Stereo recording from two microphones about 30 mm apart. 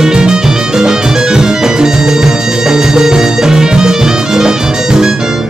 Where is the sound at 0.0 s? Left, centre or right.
Right.